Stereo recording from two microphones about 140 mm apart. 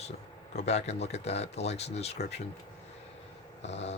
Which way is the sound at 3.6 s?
50° left (ahead or behind).